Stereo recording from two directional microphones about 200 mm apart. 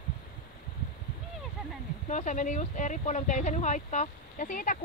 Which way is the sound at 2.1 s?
35° left (ahead or behind).